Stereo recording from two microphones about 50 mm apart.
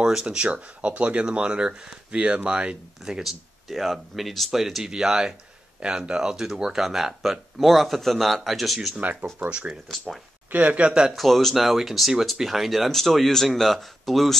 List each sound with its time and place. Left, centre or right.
0.0 s speech: centre
8.9 s speech: right
10.9 s speech: centre
11.1 s speech: centre